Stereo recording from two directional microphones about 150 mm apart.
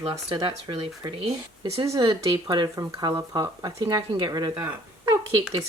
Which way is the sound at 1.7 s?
25° right (ahead or behind).